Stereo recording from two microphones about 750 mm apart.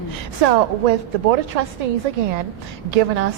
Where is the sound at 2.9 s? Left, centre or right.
Right.